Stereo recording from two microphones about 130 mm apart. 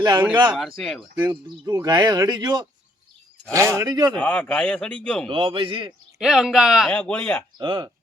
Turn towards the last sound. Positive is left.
turn(degrees=-35)  # may be behind; listen again after turning